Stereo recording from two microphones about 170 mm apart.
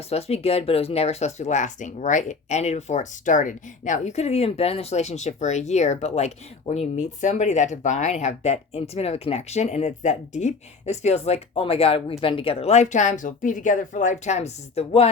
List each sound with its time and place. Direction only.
0.1 s speech: 35° left (ahead or behind)